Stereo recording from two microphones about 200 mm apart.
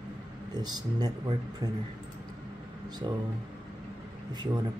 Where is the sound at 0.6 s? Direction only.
20° right (ahead or behind).